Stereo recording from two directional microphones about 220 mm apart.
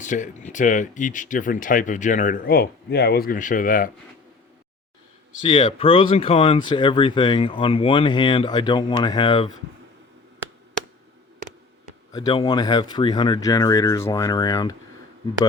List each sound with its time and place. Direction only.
0.0 s speech: 35° left (ahead or behind)
5.4 s speech: 25° left (ahead or behind)
12.1 s speech: 20° left (ahead or behind)